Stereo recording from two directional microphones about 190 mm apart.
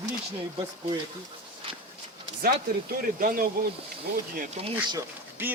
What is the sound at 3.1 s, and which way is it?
Speech, 50° right (ahead or behind).